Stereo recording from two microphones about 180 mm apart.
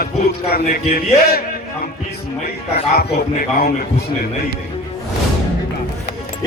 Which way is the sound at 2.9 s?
60° left (ahead or behind).